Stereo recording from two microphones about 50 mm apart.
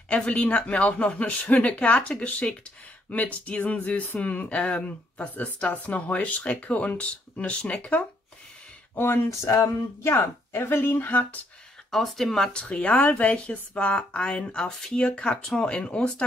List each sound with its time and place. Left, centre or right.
0.1 s speech: left
8.9 s speech: left
9.3 s speech: left
10.1 s speech: left
11.9 s speech: centre
12.8 s speech: left; by 15.0 s centre
15.0 s speech: left